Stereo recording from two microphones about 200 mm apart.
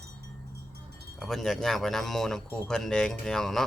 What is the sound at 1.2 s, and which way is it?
A man's voice, centre (ahead or behind).